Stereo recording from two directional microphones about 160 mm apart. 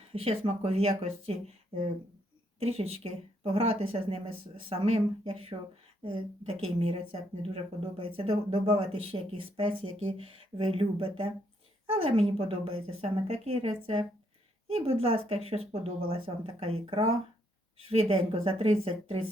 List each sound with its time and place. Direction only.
0.1 s speech: 40° right (ahead or behind)
2.6 s speech: 40° right (ahead or behind)